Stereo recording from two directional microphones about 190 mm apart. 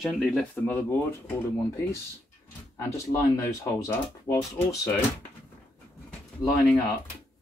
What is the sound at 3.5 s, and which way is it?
Speech, 15° left (ahead or behind).